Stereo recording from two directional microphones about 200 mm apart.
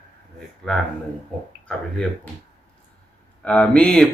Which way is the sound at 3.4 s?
5° left (ahead or behind).